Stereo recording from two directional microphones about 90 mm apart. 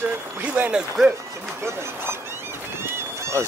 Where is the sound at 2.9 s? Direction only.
30° right (ahead or behind).